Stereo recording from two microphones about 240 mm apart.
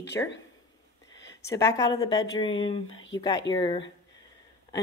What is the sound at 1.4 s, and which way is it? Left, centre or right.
Speech, centre.